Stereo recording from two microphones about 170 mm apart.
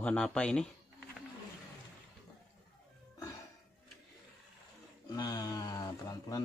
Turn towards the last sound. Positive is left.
turn(degrees=20)  # may be behind; listen again after turning